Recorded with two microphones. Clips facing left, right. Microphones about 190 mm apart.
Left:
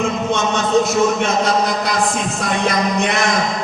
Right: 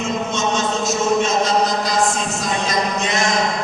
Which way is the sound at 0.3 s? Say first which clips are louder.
Left 3 dB; 60° left (ahead or behind).